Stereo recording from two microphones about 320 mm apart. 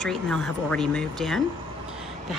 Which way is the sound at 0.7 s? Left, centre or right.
Centre.